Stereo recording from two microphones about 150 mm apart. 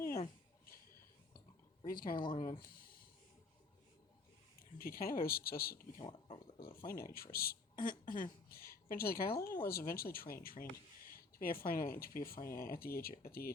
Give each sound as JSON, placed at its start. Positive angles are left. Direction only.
{"t": 1.9, "sound": "speech", "side_deg": 75}
{"t": 2.1, "sound": "speech", "side_deg": 30}
{"t": 2.6, "sound": "a sound", "side_deg": 75}
{"t": 4.8, "sound": "speech", "side_deg": 80}
{"t": 6.0, "sound": "speech", "side_deg": 30}
{"t": 6.6, "sound": "speech", "side_deg": 80}
{"t": 7.8, "sound": "speech", "side_deg": 30}
{"t": 8.2, "sound": "a woman's voice", "side_deg": 90}